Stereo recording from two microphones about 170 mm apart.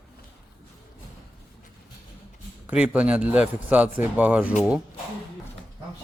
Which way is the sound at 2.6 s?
5° right (ahead or behind).